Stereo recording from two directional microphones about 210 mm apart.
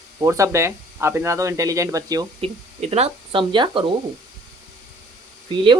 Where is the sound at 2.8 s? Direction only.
30° right (ahead or behind).